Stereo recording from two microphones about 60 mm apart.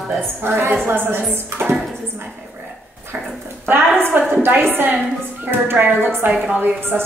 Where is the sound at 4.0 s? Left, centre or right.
Right.